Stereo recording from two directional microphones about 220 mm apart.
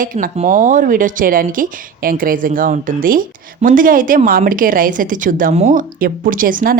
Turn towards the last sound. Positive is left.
turn(degrees=-40)  # may be behind; listen again after turning